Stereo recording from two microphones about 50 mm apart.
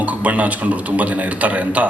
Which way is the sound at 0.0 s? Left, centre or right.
Right.